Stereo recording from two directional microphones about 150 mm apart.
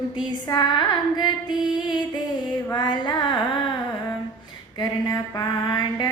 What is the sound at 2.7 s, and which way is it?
Music, 30° left (ahead or behind).